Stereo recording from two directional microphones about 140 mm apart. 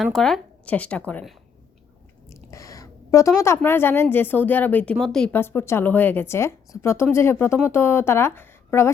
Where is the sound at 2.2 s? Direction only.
20° left (ahead or behind).